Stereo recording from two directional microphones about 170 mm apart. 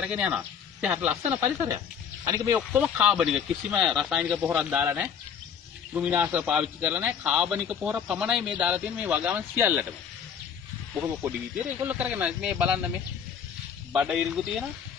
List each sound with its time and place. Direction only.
0.0 s a man's voice: 5° right (ahead or behind)
11.2 s a man's voice: 10° right (ahead or behind)
13.9 s speech: 5° right (ahead or behind)